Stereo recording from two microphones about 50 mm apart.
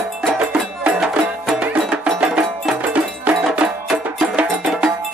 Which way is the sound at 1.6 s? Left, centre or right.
Right.